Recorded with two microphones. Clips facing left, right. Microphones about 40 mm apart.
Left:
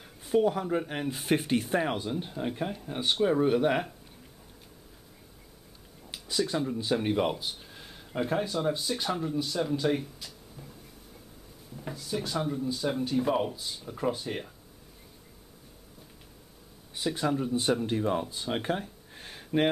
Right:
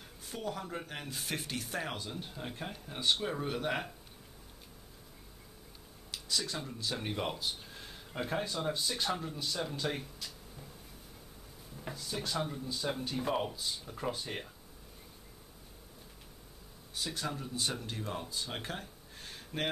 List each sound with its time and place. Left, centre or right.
0.2 s speech: centre
6.1 s speech: left; by 10.7 s centre
11.7 s speech: centre
16.9 s speech: left